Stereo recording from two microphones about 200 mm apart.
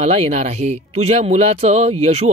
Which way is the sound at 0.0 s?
35° right (ahead or behind).